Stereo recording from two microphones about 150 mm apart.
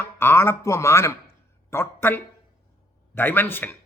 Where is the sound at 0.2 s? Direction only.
15° left (ahead or behind).